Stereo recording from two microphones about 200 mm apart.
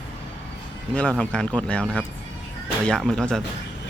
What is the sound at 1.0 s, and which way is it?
Speech, 5° left (ahead or behind).